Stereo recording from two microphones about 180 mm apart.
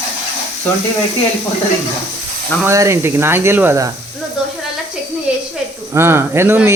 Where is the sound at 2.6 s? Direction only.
15° right (ahead or behind).